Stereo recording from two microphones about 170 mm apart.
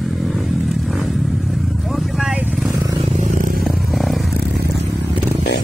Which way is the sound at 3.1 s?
45° right (ahead or behind).